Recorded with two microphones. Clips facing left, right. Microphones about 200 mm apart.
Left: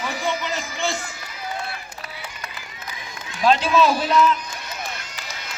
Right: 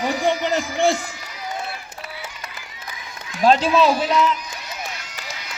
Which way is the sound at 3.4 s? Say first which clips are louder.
Right 2 dB; 35° right (ahead or behind).